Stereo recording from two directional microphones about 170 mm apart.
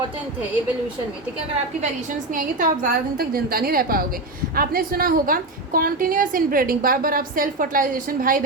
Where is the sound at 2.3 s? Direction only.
55° right (ahead or behind).